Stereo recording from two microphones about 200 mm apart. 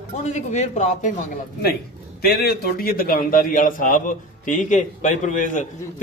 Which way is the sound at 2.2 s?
50° left (ahead or behind).